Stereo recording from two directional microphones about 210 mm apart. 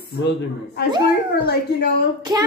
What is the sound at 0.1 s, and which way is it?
A woman's voice, 50° left (ahead or behind).